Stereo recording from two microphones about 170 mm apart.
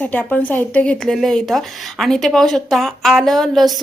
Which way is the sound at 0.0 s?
10° left (ahead or behind).